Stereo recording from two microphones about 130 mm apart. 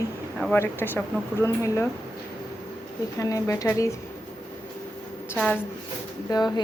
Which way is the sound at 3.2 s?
25° left (ahead or behind).